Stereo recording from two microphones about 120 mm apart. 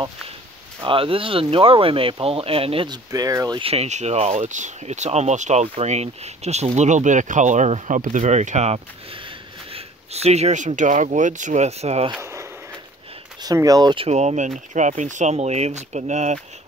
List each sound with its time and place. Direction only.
0.8 s speech: 50° right (ahead or behind)
2.9 s speech: 30° right (ahead or behind)
3.5 s speech: 55° right (ahead or behind)
9.2 s speech: 55° right (ahead or behind)
12.2 s a sound: 25° right (ahead or behind)
13.4 s speech: 30° right (ahead or behind)
13.9 s speech: 65° right (ahead or behind)
14.7 s speech: 90° right